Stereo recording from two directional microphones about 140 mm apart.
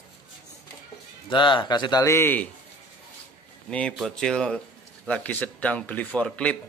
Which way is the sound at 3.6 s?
5° left (ahead or behind).